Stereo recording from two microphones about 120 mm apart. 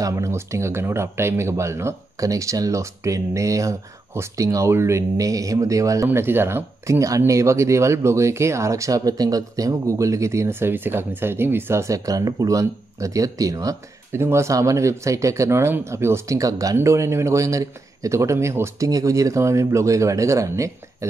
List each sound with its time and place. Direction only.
0.0 s speech: 25° right (ahead or behind)